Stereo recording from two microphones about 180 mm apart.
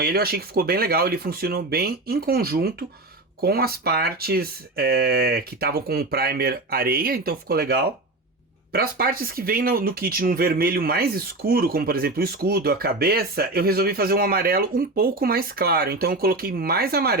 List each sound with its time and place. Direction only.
0.0 s speech: 60° right (ahead or behind)